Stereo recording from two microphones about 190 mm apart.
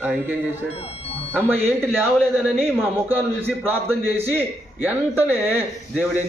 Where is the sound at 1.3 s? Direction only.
10° right (ahead or behind).